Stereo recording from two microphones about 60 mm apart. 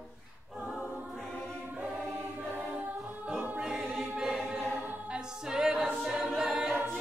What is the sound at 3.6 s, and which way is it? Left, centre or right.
Choir, centre.